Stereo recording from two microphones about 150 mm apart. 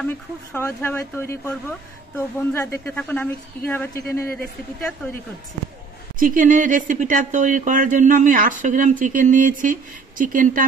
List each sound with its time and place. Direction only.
0.0 s speech: 10° left (ahead or behind)
6.1 s speech: 65° right (ahead or behind)